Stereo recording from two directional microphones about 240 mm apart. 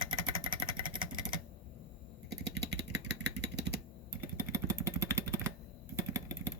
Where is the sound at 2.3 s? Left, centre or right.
Right.